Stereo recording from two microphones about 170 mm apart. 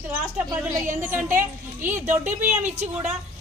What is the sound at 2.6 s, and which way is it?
Speech, 40° right (ahead or behind).